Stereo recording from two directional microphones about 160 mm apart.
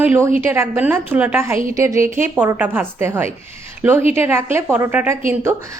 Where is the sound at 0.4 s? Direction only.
15° right (ahead or behind).